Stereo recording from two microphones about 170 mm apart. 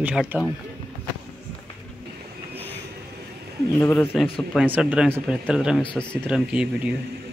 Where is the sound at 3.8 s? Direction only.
15° left (ahead or behind).